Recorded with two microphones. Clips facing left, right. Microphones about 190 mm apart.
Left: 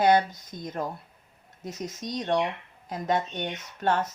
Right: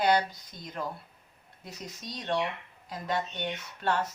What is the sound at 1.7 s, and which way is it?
Speech, 45° left (ahead or behind).